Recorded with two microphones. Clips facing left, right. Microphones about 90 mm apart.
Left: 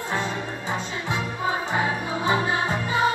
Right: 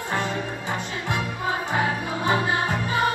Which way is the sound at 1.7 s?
55° right (ahead or behind).